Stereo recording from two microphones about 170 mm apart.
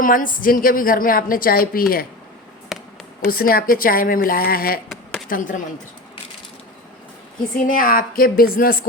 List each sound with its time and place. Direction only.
0.0 s a woman's voice: 55° left (ahead or behind)
2.7 s a sound: centre (ahead or behind)
3.2 s a woman's voice: 60° left (ahead or behind)
5.3 s speech: 50° left (ahead or behind)
7.5 s a woman's voice: 55° left (ahead or behind)